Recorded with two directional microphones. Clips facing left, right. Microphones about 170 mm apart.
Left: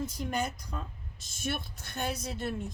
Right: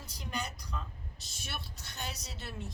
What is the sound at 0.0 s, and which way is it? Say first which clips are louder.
Speech: left 8 dB; 50° left (ahead or behind).